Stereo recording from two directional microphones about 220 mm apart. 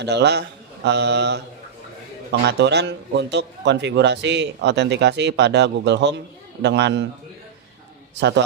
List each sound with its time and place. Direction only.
0.0 s a man's voice: 50° right (ahead or behind)
8.2 s a man's voice: 50° right (ahead or behind)